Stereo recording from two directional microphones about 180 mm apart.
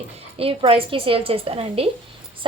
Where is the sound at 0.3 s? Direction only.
30° right (ahead or behind).